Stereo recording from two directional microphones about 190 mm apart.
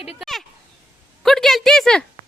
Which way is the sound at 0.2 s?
Centre (ahead or behind).